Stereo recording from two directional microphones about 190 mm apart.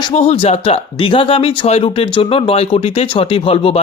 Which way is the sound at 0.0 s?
30° left (ahead or behind).